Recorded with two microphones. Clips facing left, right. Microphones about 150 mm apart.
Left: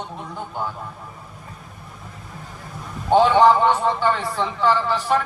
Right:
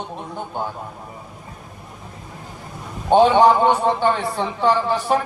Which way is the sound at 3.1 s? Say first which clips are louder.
Right 1 dB; 20° right (ahead or behind).